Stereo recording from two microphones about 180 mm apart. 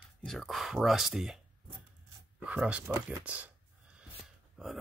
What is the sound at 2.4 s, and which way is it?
Speech, 5° right (ahead or behind).